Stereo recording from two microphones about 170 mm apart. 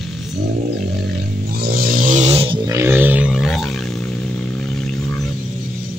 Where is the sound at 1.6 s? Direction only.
60° right (ahead or behind); by 2.6 s 35° right (ahead or behind).